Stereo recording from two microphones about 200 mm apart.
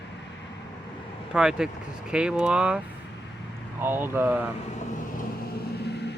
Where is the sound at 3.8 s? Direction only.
10° right (ahead or behind).